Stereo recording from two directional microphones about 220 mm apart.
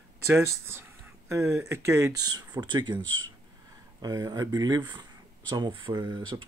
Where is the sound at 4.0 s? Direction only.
15° right (ahead or behind).